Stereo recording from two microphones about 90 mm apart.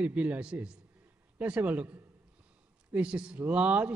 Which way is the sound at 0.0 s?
15° right (ahead or behind).